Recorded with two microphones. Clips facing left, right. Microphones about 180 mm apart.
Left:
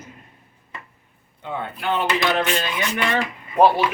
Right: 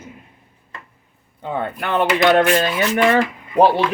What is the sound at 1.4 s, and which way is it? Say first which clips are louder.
Speech: right 3 dB; 55° right (ahead or behind).